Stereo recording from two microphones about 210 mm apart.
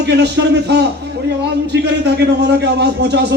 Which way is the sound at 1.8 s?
55° right (ahead or behind).